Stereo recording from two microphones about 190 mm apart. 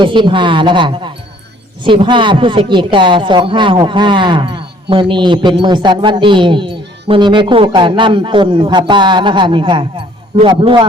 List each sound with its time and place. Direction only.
0.0 s speech: 25° right (ahead or behind)